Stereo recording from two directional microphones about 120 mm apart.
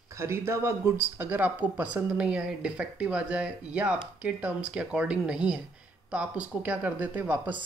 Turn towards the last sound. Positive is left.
turn(degrees=-15)  # may be behind; listen again after turning